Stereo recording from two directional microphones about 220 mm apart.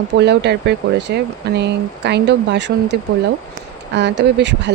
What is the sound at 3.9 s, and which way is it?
Speech, 50° right (ahead or behind).